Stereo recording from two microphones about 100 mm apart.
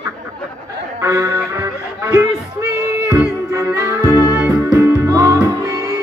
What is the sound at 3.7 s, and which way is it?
Speech, 35° right (ahead or behind).